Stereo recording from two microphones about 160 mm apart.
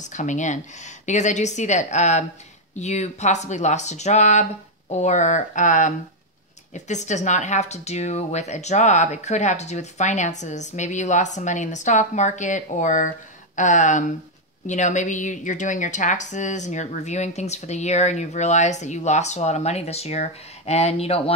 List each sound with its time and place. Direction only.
0.1 s a woman's voice: 50° left (ahead or behind)